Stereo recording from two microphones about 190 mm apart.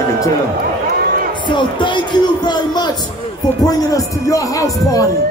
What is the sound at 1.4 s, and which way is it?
A man's voice, 25° left (ahead or behind).